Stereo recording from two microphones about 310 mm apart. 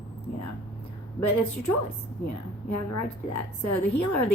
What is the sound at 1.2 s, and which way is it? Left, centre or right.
A woman's voice, left.